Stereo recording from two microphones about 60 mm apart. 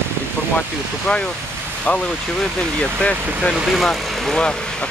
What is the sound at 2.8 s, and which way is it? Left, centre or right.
Speech, centre.